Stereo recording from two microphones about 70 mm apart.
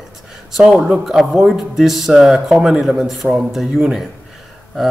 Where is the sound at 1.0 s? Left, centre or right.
Centre.